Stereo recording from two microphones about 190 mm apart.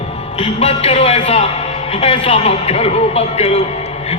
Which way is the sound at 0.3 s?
30° left (ahead or behind).